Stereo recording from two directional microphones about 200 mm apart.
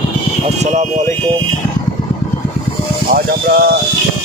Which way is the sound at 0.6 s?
35° right (ahead or behind).